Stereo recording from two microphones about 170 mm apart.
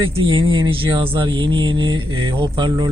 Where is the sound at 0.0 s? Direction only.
30° right (ahead or behind).